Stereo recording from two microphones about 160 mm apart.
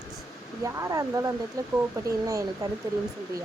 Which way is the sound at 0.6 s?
20° right (ahead or behind).